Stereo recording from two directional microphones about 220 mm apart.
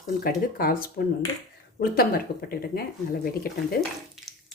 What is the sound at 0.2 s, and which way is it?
Speech, 40° left (ahead or behind).